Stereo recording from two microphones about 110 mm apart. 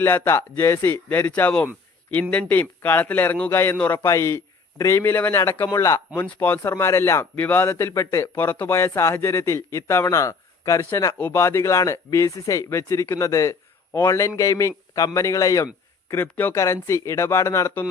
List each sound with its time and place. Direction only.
0.0 s a man's voice: 20° left (ahead or behind)
6.1 s a man's voice: 15° left (ahead or behind)
16.2 s a man's voice: 15° left (ahead or behind)
16.6 s speech: 30° left (ahead or behind)